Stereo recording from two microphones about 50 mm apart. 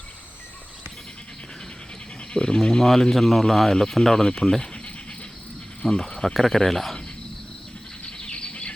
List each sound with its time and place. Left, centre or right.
2.3 s speech: centre
5.8 s cricket: centre
6.3 s speech: centre
8.0 s a sound: left